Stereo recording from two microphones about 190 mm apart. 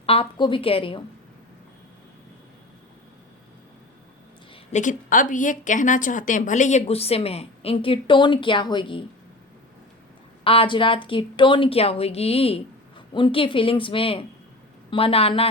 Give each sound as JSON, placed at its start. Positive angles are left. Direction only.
{"t": 0.0, "sound": "a woman's voice", "side_deg": 30}
{"t": 4.7, "sound": "a woman's voice", "side_deg": 40}
{"t": 10.4, "sound": "a woman's voice", "side_deg": 30}